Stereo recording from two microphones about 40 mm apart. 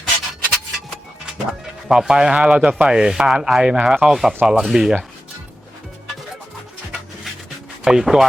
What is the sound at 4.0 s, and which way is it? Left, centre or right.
Speech, centre.